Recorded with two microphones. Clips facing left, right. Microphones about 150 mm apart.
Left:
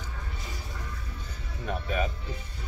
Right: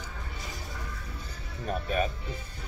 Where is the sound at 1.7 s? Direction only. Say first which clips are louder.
Right 1 dB; 40° right (ahead or behind).